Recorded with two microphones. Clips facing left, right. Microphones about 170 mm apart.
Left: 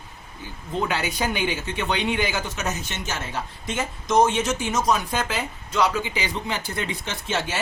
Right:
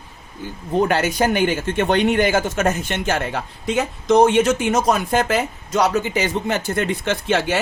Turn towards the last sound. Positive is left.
turn(degrees=-60)  # may be behind; listen again after turning